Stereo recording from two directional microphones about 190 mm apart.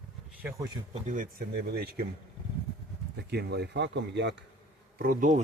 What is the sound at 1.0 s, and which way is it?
Speech, 45° right (ahead or behind).